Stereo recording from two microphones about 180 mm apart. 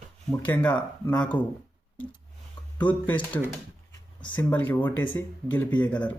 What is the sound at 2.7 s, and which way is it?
Speech, 10° left (ahead or behind).